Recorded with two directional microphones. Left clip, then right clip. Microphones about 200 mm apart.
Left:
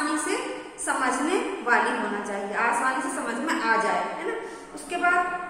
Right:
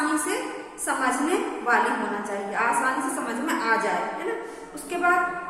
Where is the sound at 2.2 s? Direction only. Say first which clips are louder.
Right 1 dB; 15° right (ahead or behind).